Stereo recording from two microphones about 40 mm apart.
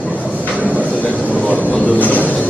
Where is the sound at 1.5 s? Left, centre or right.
Left.